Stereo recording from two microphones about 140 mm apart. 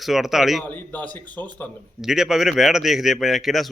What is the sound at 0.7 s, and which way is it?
A man's voice, 10° left (ahead or behind).